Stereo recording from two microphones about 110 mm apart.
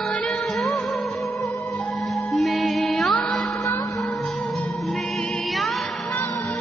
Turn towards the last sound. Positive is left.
turn(degrees=0)  # may be behind; listen again after turning